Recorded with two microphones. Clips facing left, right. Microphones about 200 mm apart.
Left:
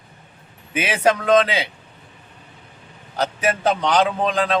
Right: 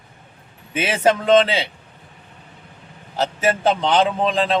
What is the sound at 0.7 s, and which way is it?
Speech, 25° right (ahead or behind).